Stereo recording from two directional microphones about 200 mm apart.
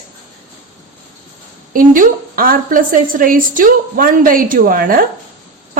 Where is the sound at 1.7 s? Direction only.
45° right (ahead or behind).